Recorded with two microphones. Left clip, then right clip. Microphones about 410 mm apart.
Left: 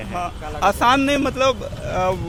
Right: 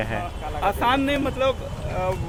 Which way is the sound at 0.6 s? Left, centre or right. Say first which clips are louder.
Left 5 dB; left.